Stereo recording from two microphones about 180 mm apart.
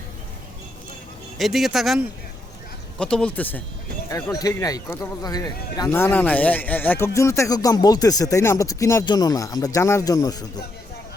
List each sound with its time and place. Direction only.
1.4 s speech: centre (ahead or behind)
3.0 s speech: 5° left (ahead or behind)
4.1 s speech: 20° left (ahead or behind)